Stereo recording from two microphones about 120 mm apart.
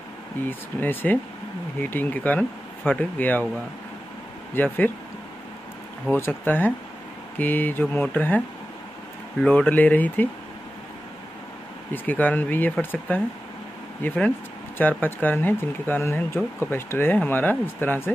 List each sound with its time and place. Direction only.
0.5 s speech: 15° left (ahead or behind)
4.6 s speech: 15° left (ahead or behind)
6.1 s speech: 15° left (ahead or behind)
9.4 s speech: 10° left (ahead or behind)
11.9 s speech: 15° left (ahead or behind)